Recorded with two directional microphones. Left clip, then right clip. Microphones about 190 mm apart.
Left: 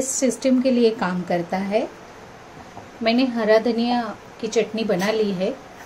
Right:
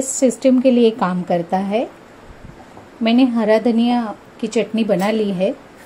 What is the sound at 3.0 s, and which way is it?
A woman's voice, 30° right (ahead or behind).